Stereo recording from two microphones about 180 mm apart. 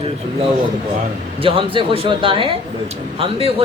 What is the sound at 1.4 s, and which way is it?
Speech, 30° right (ahead or behind).